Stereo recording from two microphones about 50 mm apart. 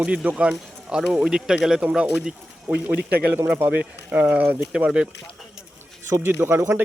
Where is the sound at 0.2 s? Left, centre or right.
Right.